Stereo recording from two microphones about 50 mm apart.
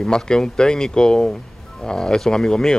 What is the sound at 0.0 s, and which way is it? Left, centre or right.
A man's voice, centre.